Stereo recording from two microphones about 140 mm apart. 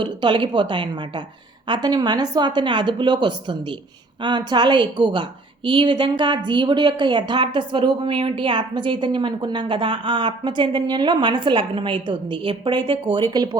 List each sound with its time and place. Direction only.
0.0 s a woman's voice: 35° right (ahead or behind)